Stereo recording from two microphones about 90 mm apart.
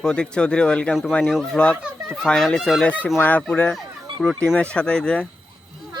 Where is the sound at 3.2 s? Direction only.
20° left (ahead or behind).